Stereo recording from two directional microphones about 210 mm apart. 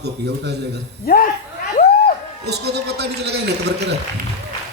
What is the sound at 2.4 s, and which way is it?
A man's voice, 50° right (ahead or behind).